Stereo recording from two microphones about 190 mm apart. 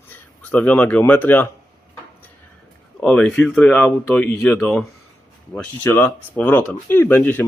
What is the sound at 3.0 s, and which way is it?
Speech, 5° left (ahead or behind).